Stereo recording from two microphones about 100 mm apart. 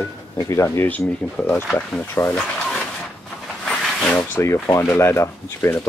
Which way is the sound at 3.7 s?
10° left (ahead or behind).